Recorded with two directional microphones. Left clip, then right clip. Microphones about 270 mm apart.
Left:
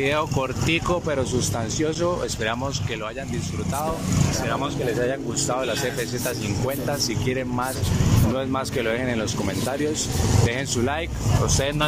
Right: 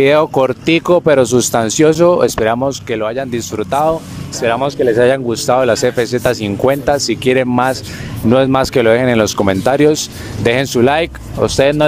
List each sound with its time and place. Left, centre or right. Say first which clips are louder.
0.0 s speech: right 13 dB; right